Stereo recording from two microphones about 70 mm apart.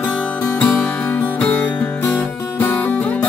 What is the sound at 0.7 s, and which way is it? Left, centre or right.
Music, left.